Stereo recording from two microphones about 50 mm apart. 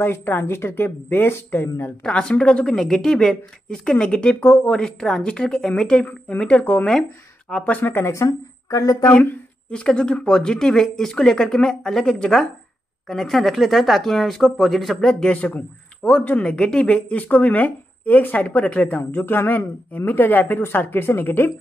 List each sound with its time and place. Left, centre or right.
0.0 s speech: left
2.0 s speech: left
4.7 s speech: centre
6.6 s speech: left
7.4 s speech: left
7.7 s speech: left
8.1 s speech: left
9.7 s speech: centre
15.3 s speech: left